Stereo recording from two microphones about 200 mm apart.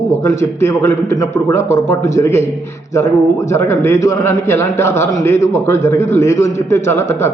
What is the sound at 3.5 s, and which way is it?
A man's voice, 15° left (ahead or behind).